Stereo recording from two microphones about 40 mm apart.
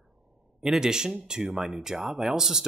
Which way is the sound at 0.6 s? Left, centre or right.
Centre.